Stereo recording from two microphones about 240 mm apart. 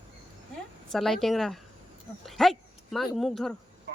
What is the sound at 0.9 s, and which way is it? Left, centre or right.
Speech, centre.